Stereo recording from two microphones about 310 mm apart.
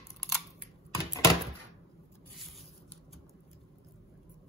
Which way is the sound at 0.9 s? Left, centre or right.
Centre.